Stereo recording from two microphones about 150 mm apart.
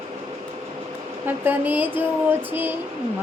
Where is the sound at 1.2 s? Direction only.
10° right (ahead or behind).